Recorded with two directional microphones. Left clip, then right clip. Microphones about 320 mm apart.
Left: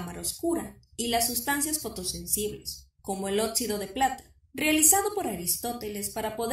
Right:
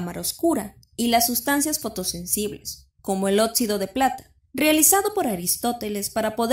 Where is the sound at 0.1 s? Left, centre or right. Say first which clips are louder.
Right 7 dB; right.